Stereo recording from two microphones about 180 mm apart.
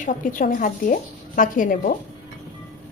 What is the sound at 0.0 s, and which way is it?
A woman's voice, 45° left (ahead or behind).